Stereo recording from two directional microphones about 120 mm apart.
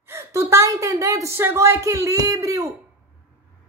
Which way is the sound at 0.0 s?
20° right (ahead or behind).